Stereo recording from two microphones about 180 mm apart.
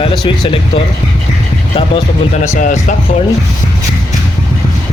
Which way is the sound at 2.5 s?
45° left (ahead or behind).